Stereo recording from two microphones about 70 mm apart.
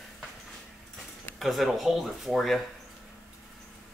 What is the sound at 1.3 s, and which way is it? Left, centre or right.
Speech, centre.